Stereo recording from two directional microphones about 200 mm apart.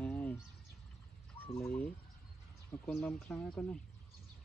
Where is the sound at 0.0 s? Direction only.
10° left (ahead or behind).